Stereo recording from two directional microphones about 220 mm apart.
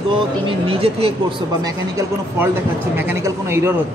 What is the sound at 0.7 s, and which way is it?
Speech, 25° right (ahead or behind).